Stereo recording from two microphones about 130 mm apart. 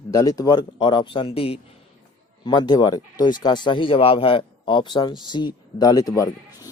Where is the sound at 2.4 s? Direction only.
35° left (ahead or behind).